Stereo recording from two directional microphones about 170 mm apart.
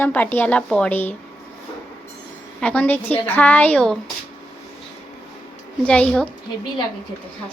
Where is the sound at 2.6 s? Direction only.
5° left (ahead or behind).